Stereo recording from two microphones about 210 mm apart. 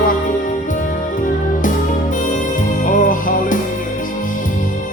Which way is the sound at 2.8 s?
40° left (ahead or behind).